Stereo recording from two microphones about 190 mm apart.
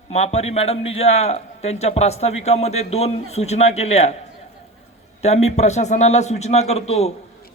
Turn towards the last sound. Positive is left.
turn(degrees=35)  # may be behind; listen again after turning